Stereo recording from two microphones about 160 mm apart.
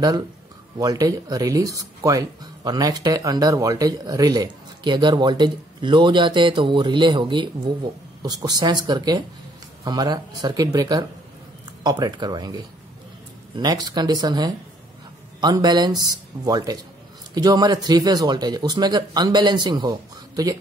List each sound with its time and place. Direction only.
0.7 s speech: 25° right (ahead or behind)